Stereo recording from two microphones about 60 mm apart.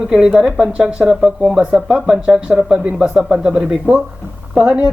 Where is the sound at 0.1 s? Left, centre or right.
Centre.